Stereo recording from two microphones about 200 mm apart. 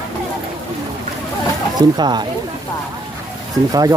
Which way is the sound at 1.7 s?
20° right (ahead or behind).